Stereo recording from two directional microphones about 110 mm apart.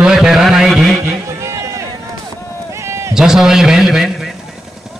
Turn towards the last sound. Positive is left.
turn(degrees=0)  # may be behind; listen again after turning